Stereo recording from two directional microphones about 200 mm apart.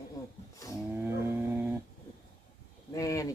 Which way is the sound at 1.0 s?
10° right (ahead or behind).